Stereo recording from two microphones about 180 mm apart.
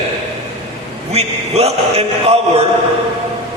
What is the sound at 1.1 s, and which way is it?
Chant, 35° right (ahead or behind).